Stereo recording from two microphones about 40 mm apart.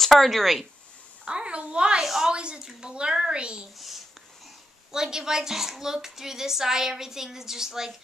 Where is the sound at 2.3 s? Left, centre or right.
Right.